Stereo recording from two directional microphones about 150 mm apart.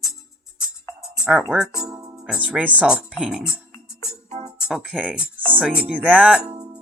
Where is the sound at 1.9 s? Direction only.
25° right (ahead or behind).